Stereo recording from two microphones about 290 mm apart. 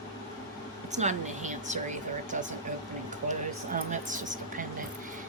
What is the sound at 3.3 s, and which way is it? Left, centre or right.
A woman's voice, right.